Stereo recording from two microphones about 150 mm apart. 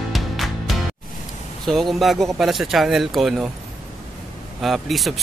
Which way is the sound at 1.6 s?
Centre (ahead or behind).